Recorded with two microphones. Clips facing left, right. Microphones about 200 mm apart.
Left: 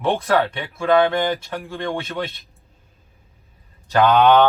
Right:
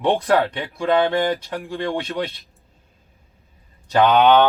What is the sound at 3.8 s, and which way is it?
Speech, 15° right (ahead or behind).